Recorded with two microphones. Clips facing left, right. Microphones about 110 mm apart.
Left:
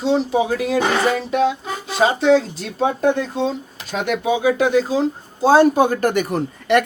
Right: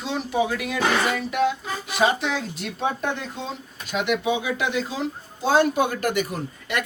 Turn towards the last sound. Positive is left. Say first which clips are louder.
# left 11 dB
turn(degrees=60)  # may be behind; listen again after turning